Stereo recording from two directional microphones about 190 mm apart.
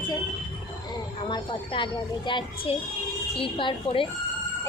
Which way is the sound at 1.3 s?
25° left (ahead or behind).